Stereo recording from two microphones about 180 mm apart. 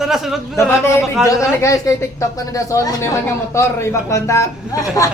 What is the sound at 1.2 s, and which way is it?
Speech, 15° left (ahead or behind).